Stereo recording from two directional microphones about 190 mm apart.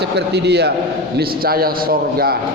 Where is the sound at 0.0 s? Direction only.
60° right (ahead or behind).